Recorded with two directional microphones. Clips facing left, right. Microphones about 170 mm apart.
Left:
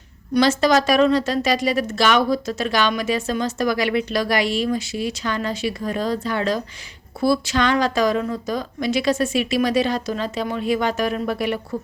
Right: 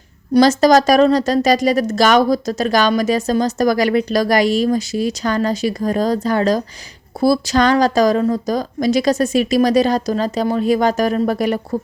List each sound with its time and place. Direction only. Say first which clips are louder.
0.3 s speech: right 6 dB; 40° right (ahead or behind)